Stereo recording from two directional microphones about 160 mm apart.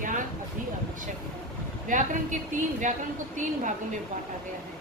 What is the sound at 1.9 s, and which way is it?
Speech, 55° right (ahead or behind).